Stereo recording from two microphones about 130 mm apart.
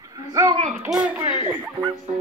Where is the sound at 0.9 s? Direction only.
10° right (ahead or behind).